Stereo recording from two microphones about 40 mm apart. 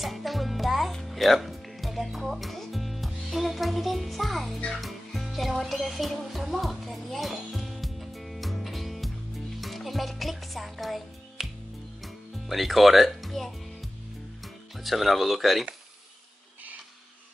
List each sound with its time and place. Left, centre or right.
0.0 s music: centre
9.6 s speech: centre
12.0 s music: centre
14.4 s speech: centre